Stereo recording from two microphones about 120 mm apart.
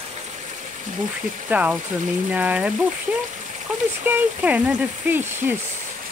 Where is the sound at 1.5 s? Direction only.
15° right (ahead or behind).